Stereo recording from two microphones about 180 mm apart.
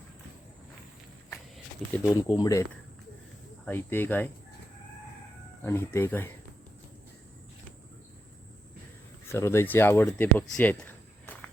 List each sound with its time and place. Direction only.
2.0 s speech: 15° left (ahead or behind)
3.7 s speech: 10° left (ahead or behind)
5.6 s speech: 15° left (ahead or behind)
9.2 s speech: 15° left (ahead or behind)